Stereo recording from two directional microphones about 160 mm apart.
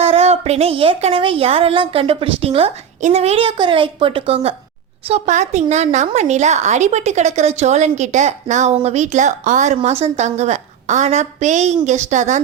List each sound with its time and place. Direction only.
0.0 s a woman's voice: 40° right (ahead or behind)